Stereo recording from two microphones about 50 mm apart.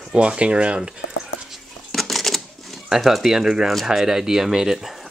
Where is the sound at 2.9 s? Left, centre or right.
Centre.